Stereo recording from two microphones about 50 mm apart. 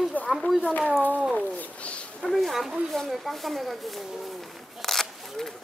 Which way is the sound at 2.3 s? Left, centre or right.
Centre.